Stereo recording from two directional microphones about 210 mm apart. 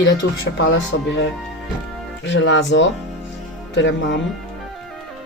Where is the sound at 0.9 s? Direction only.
65° left (ahead or behind).